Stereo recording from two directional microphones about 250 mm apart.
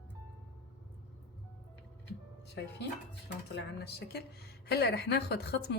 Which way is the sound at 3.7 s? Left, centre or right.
Left.